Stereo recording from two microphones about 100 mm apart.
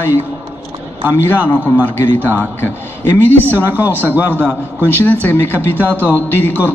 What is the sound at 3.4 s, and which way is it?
A man's voice, 20° right (ahead or behind).